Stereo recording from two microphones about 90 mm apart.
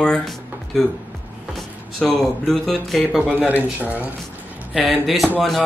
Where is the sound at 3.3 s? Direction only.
20° right (ahead or behind).